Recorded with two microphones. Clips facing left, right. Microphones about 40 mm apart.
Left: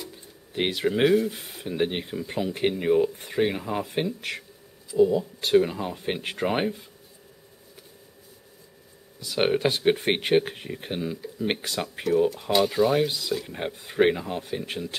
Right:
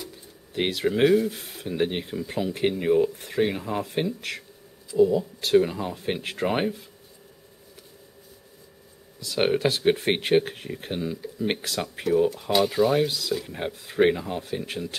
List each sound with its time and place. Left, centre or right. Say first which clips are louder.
0.5 s speech: even; centre
9.2 s speech: even; centre